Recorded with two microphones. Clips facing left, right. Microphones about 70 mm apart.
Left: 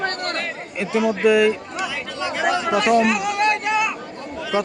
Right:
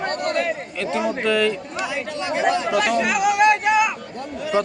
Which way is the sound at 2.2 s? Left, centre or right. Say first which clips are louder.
Even; right.